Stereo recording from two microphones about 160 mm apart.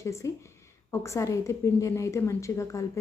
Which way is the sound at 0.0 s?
20° left (ahead or behind).